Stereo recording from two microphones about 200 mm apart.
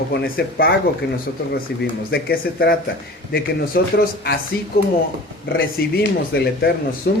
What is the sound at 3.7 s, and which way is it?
Speech, 50° left (ahead or behind).